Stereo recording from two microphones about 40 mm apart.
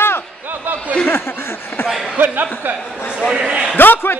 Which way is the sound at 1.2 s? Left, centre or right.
Left.